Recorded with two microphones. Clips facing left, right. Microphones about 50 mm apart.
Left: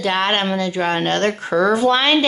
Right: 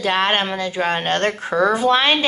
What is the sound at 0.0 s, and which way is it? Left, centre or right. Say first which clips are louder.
Speech: even; right.